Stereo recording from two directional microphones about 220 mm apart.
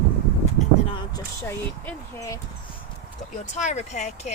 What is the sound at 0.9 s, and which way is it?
Speech, 15° left (ahead or behind).